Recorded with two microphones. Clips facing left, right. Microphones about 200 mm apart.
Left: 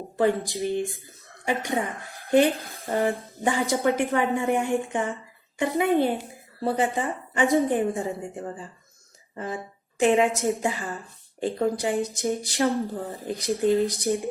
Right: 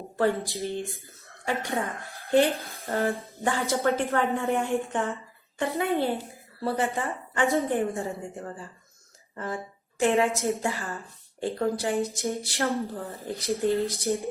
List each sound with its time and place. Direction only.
0.2 s speech: 15° left (ahead or behind)